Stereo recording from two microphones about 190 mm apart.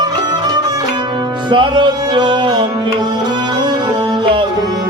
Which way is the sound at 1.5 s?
25° right (ahead or behind).